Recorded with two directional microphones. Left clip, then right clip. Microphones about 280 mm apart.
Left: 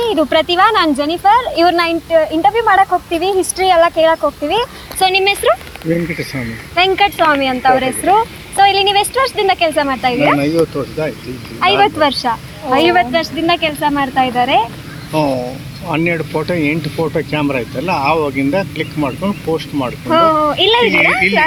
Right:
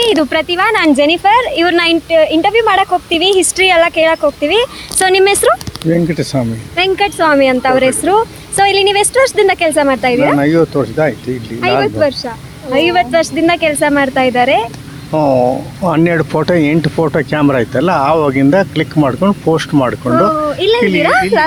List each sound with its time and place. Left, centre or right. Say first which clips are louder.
0.0 s a sound: right 3 dB; right
0.3 s speech: left 2 dB; centre
0.7 s speech: right 4 dB; right
1.5 s speech: even; centre
1.8 s speech: right 3 dB; right
3.1 s speech: right 4 dB; centre
3.6 s speech: even; right
6.7 s speech: left 1 dB; centre
7.2 s speech: right 3 dB; right
11.6 s speech: left 1 dB; centre
12.9 s speech: right 2 dB; right
20.5 s speech: even; centre